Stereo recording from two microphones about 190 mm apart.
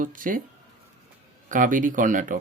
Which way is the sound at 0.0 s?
45° right (ahead or behind).